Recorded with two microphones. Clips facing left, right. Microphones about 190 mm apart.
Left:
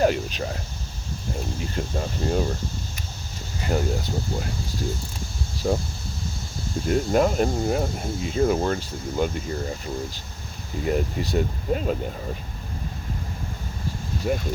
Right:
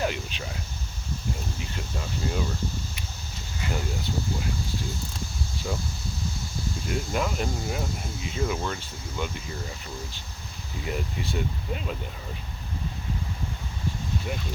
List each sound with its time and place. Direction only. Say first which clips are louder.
0.0 s a sound: left 8 dB; 40° left (ahead or behind)
1.7 s speech: left 7 dB; 45° left (ahead or behind)
5.6 s speech: left 9 dB; 45° left (ahead or behind)
6.8 s speech: left 9 dB; 45° left (ahead or behind)
10.8 s speech: left 7 dB; 40° left (ahead or behind)